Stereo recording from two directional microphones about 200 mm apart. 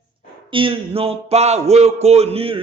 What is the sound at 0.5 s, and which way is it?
Speech, 25° right (ahead or behind).